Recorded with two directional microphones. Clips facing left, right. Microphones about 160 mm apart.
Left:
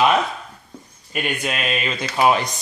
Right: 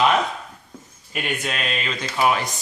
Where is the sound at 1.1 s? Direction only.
Centre (ahead or behind); by 2.4 s 25° left (ahead or behind).